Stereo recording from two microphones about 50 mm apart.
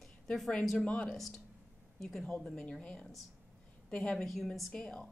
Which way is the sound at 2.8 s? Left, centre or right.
Left.